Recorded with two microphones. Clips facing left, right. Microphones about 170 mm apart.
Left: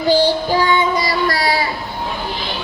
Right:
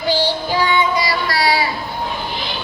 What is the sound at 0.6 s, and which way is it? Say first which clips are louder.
Child singing: left 1 dB; 45° left (ahead or behind).